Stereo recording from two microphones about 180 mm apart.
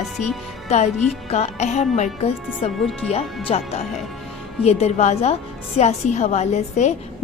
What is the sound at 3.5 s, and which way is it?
A woman's voice, 35° left (ahead or behind).